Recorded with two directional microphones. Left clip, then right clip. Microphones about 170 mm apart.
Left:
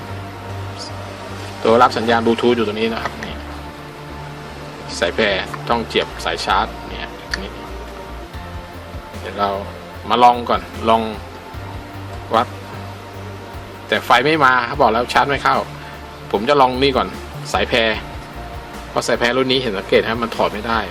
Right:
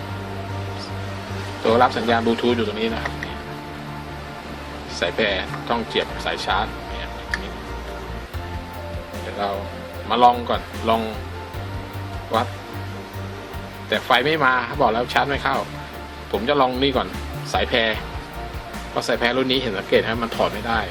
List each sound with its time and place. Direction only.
1.6 s speech: 20° left (ahead or behind)
4.9 s speech: 25° left (ahead or behind)
9.4 s speech: 25° left (ahead or behind)
13.9 s speech: 25° left (ahead or behind)
18.9 s speech: 20° left (ahead or behind)